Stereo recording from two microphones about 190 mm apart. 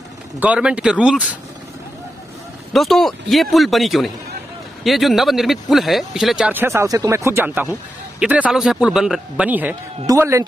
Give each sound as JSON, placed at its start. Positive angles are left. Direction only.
{"t": 0.4, "sound": "speech", "side_deg": -5}
{"t": 2.7, "sound": "a man's voice", "side_deg": 0}